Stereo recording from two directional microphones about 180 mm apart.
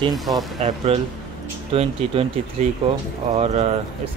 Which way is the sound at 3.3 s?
35° right (ahead or behind).